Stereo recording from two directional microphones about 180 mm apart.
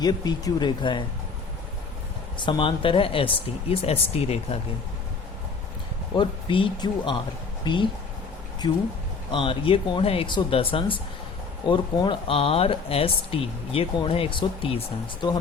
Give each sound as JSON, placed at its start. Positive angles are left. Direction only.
{"t": 0.0, "sound": "speech", "side_deg": 25}
{"t": 2.4, "sound": "speech", "side_deg": 25}
{"t": 6.1, "sound": "speech", "side_deg": 25}